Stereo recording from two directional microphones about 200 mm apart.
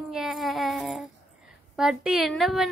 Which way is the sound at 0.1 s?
Centre (ahead or behind).